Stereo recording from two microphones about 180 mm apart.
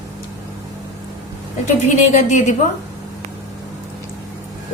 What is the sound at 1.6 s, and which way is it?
Speech, 40° left (ahead or behind).